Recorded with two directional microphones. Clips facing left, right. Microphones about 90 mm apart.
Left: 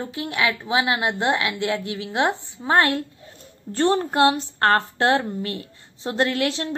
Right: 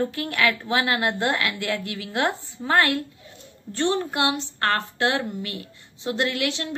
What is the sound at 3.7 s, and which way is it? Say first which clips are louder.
A woman's voice: left 4 dB; 40° left (ahead or behind).